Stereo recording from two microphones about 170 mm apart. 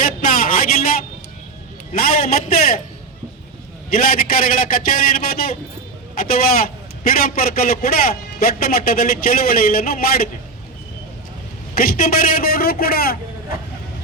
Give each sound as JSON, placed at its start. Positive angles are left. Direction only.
{"t": 0.0, "sound": "a sound", "side_deg": 60}
{"t": 2.0, "sound": "a man's voice", "side_deg": 60}
{"t": 3.9, "sound": "a man's voice", "side_deg": 60}
{"t": 11.7, "sound": "a man's voice", "side_deg": 60}